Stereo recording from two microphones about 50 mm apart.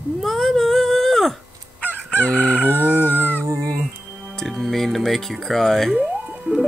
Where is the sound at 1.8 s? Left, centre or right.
Left.